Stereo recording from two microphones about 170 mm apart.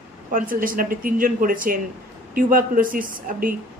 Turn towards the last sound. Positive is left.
turn(degrees=-55)  # may be behind; listen again after turning